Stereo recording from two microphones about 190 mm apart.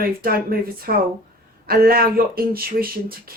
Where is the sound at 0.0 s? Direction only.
50° right (ahead or behind).